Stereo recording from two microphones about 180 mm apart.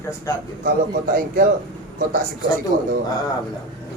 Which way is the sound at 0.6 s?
55° right (ahead or behind).